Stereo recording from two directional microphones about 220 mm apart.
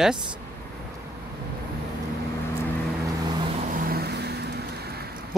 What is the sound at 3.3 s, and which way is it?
Vehicle, 25° right (ahead or behind).